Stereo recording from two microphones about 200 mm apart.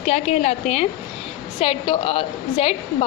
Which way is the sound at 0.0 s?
35° left (ahead or behind).